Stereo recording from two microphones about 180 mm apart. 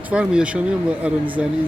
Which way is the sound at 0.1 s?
5° right (ahead or behind).